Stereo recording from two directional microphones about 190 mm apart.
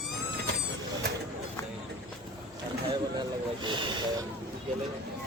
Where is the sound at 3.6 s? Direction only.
25° right (ahead or behind).